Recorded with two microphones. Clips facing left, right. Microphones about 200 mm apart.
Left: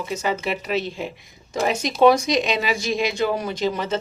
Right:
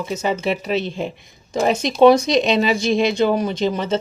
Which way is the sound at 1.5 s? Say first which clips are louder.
Right 4 dB; 20° right (ahead or behind).